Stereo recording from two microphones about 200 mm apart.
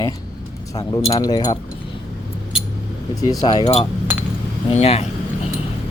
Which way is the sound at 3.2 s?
20° left (ahead or behind).